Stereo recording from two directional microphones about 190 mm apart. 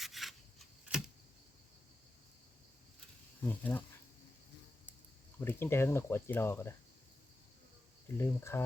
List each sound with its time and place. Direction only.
0.0 s rub: centre (ahead or behind)
3.4 s speech: 10° left (ahead or behind)
5.4 s speech: 10° left (ahead or behind)
8.0 s speech: 15° left (ahead or behind)